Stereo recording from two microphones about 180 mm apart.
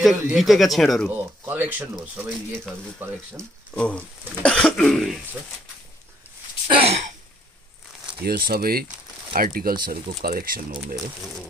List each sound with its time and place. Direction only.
0.0 s speech: centre (ahead or behind)
1.1 s speech: 10° right (ahead or behind)
3.3 s speech: 5° left (ahead or behind)
6.7 s throat clearing: 35° right (ahead or behind)
8.2 s speech: 55° right (ahead or behind)